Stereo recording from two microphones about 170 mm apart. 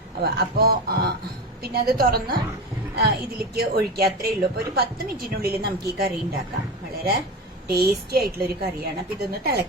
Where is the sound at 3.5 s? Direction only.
65° right (ahead or behind).